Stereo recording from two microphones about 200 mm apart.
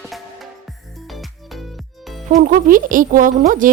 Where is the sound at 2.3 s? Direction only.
40° right (ahead or behind).